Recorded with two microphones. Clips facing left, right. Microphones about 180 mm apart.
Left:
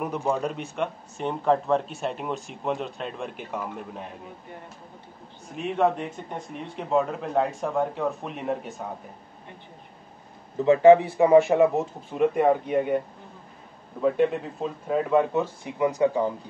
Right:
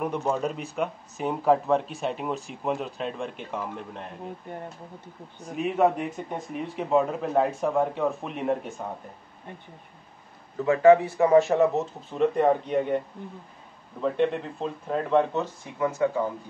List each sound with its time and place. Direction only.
0.0 s speech: centre (ahead or behind)
5.6 s speech: 5° right (ahead or behind)
10.6 s speech: 20° left (ahead or behind); by 13.0 s 5° left (ahead or behind)
14.0 s speech: 5° left (ahead or behind)